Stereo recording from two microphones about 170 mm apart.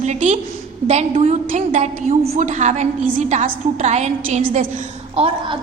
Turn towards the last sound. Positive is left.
turn(degrees=-35)  # may be behind; listen again after turning